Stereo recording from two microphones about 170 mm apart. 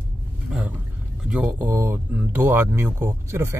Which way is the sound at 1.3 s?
10° right (ahead or behind).